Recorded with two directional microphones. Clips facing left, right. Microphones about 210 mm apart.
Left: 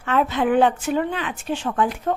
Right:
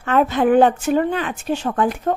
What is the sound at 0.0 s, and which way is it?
A woman's voice, 45° right (ahead or behind).